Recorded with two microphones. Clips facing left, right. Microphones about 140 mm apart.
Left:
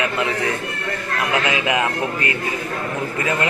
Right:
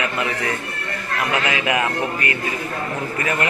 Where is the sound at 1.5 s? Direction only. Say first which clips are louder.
Left 1 dB; 20° left (ahead or behind).